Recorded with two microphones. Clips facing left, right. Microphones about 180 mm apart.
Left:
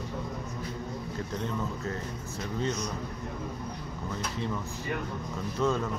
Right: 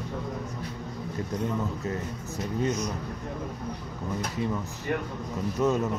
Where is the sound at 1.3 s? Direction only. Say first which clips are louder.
Right 4 dB; 15° right (ahead or behind).